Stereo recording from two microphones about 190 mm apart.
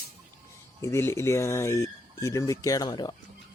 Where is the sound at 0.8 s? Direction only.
15° left (ahead or behind).